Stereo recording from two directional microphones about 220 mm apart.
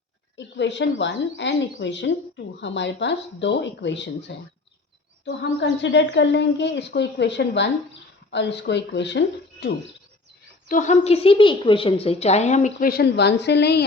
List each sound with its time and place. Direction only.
0.3 s a woman's voice: 55° left (ahead or behind)
10.7 s a woman's voice: 35° left (ahead or behind)